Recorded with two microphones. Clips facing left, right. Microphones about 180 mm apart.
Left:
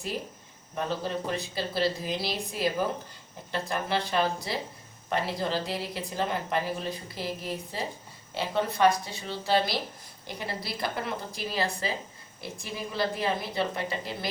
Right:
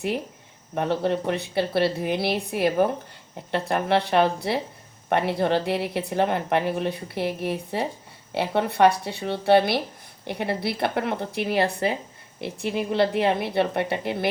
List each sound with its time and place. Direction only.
0.7 s speech: 65° right (ahead or behind)